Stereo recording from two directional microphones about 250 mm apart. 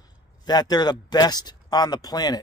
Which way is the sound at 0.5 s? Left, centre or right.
Centre.